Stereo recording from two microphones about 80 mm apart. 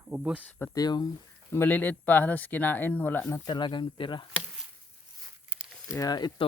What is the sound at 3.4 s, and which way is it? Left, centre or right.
Speech, left.